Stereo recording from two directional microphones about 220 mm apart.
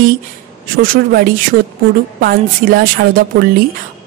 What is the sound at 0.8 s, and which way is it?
A woman's voice, 40° right (ahead or behind).